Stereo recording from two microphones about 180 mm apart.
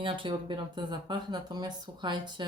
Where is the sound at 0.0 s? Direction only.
30° right (ahead or behind).